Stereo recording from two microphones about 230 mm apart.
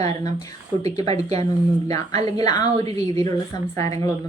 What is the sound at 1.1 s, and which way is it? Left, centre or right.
Speech, right.